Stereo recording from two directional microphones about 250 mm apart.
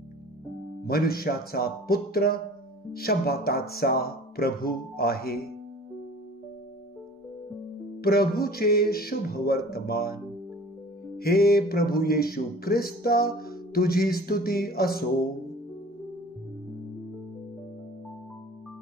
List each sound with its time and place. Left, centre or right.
0.8 s speech: left
8.0 s speech: left